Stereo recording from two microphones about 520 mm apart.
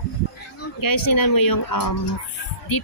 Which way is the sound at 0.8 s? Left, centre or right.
Left.